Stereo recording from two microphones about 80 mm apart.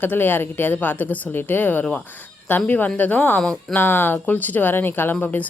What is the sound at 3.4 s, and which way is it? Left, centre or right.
Speech, centre.